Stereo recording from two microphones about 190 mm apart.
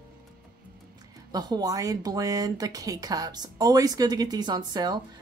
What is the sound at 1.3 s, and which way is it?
Speech, 20° right (ahead or behind).